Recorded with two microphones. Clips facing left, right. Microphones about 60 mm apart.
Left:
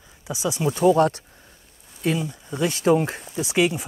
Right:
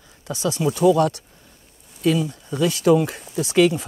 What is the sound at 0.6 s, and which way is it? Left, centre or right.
Speech, left.